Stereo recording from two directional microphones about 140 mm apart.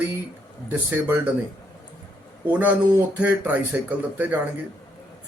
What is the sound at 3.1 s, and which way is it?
A man's voice, 10° right (ahead or behind).